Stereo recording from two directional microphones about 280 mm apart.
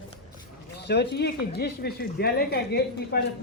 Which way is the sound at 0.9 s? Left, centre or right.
Left.